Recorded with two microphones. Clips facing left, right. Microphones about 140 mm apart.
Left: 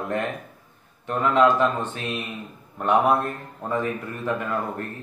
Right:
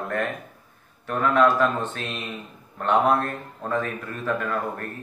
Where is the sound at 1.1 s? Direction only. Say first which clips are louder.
Left 1 dB; 15° left (ahead or behind).